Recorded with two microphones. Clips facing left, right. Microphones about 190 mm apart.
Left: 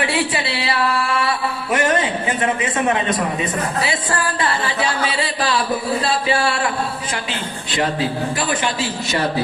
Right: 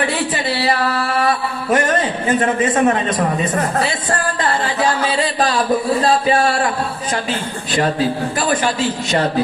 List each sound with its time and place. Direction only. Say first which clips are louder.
0.0 s a sound: right 1 dB; 45° right (ahead or behind)
1.7 s a man's voice: right 2 dB; 45° right (ahead or behind)
5.4 s a man's voice: right 3 dB; 45° right (ahead or behind)
8.4 s a man's voice: right 5 dB; 45° right (ahead or behind)